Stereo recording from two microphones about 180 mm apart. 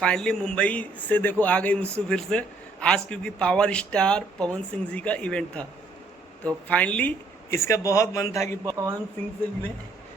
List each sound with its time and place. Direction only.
0.0 s a man's voice: 5° left (ahead or behind)
8.6 s speech: 20° right (ahead or behind)